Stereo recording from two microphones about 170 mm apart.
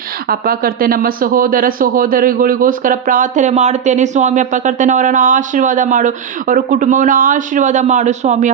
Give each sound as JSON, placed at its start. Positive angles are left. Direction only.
{"t": 0.3, "sound": "speech", "side_deg": -60}